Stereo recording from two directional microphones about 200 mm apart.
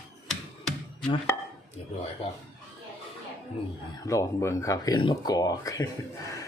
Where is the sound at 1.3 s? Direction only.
15° left (ahead or behind).